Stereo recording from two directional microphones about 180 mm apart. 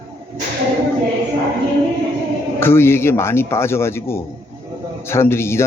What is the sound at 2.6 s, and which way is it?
A man's voice, 15° left (ahead or behind).